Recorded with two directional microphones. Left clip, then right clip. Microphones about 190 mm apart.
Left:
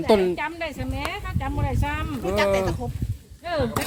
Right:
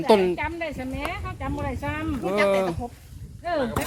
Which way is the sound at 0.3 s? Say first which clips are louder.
Even; 35° left (ahead or behind).